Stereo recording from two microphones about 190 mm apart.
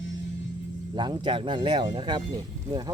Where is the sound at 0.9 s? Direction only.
25° right (ahead or behind).